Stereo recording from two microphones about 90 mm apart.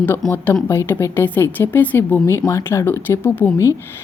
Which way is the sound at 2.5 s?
35° left (ahead or behind).